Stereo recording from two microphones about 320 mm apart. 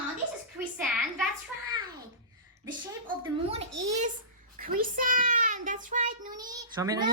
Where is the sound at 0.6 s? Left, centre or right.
Centre.